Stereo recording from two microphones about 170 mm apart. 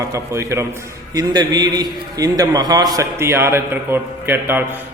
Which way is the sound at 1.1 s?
25° right (ahead or behind).